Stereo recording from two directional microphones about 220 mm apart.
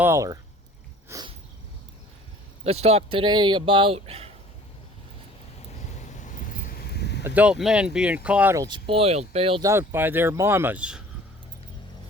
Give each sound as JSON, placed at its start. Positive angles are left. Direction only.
{"t": 0.0, "sound": "speech", "side_deg": -15}
{"t": 1.0, "sound": "sniff", "side_deg": -20}
{"t": 2.6, "sound": "speech", "side_deg": -30}
{"t": 6.0, "sound": "a sound", "side_deg": 35}
{"t": 7.3, "sound": "speech", "side_deg": -5}
{"t": 9.6, "sound": "speech", "side_deg": -10}